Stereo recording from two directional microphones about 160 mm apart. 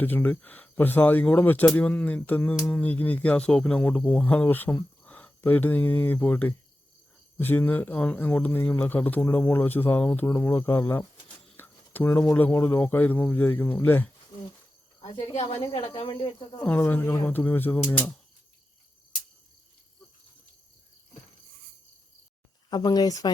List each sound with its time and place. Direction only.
0.0 s speech: 10° left (ahead or behind)
15.0 s speech: 40° left (ahead or behind)
16.6 s speech: 10° left (ahead or behind)
22.7 s speech: 25° left (ahead or behind)